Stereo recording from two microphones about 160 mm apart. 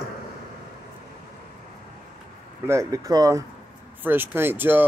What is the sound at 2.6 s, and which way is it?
Speech, 20° right (ahead or behind).